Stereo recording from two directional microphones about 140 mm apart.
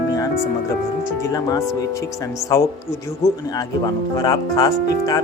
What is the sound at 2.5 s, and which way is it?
Speech, 30° left (ahead or behind).